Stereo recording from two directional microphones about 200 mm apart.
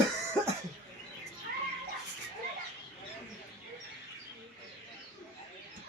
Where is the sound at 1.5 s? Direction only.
50° right (ahead or behind).